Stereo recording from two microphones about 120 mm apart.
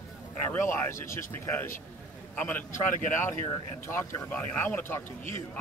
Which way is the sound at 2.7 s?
90° left.